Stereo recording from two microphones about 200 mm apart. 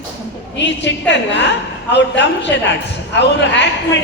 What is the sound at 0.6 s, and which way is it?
Speech, 60° left (ahead or behind).